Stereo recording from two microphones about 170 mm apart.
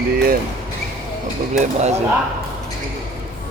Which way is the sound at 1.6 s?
40° right (ahead or behind).